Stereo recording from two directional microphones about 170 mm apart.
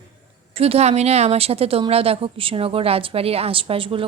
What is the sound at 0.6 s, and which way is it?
A woman's voice, 40° right (ahead or behind).